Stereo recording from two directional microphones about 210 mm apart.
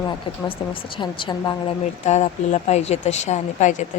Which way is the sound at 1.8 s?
30° left (ahead or behind).